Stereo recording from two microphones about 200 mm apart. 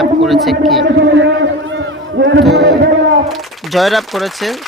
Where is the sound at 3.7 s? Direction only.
Centre (ahead or behind).